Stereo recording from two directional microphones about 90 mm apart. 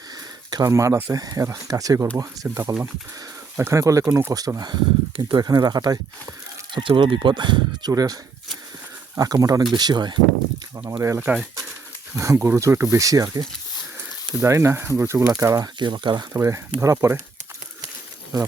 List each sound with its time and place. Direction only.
0.5 s speech: 40° right (ahead or behind)
4.4 s speech: 45° right (ahead or behind); by 5.5 s 60° right (ahead or behind)
5.5 s speech: 45° right (ahead or behind)
6.7 s speech: 60° right (ahead or behind)
10.8 s speech: 35° right (ahead or behind); by 16.2 s 55° right (ahead or behind)
16.3 s speech: 35° right (ahead or behind)